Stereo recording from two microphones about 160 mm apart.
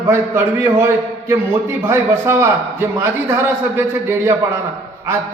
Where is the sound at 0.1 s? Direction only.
15° right (ahead or behind).